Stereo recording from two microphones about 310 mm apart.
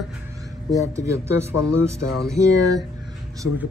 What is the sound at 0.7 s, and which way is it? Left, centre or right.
Speech, centre.